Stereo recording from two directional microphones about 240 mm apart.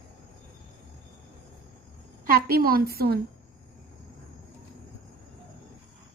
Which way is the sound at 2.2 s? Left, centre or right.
Right.